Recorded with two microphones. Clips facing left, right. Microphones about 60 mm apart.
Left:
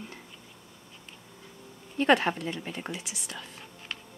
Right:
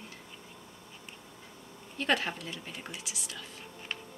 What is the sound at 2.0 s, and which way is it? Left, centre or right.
Speech, left.